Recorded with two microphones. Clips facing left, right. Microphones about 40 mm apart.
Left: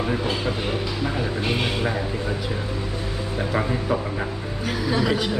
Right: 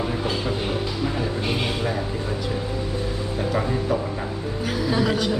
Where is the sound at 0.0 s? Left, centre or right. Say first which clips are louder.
Left 1 dB; centre.